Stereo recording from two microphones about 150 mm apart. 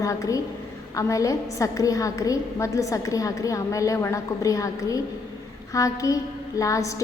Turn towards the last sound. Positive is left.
turn(degrees=20)  # may be behind; listen again after turning